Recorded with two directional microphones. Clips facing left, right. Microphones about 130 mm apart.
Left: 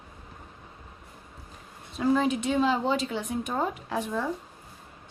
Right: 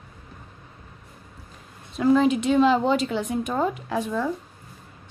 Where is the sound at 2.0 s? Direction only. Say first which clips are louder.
Right 5 dB; 85° right.